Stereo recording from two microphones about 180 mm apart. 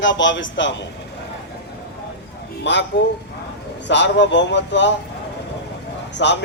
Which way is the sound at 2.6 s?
75° left (ahead or behind).